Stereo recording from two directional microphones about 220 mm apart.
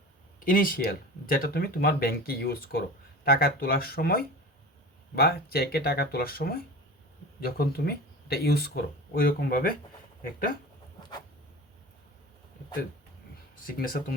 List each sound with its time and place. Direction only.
0.3 s speech: 40° left (ahead or behind)
13.7 s speech: 40° left (ahead or behind)